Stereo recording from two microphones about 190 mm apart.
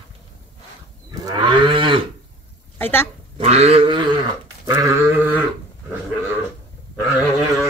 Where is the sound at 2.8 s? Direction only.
10° left (ahead or behind).